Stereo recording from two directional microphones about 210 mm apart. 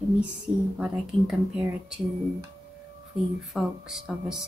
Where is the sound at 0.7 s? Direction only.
5° right (ahead or behind).